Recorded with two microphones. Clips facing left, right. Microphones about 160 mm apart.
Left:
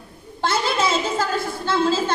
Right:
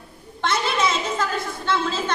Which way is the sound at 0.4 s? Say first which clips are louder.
Left 1 dB; 30° left (ahead or behind).